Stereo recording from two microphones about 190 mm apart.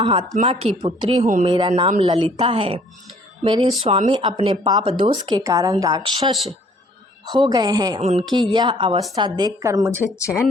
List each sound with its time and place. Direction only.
0.0 s a woman's voice: 30° right (ahead or behind)
1.2 s speech: 40° right (ahead or behind)
1.5 s a woman's voice: 25° right (ahead or behind)
10.2 s speech: 15° left (ahead or behind)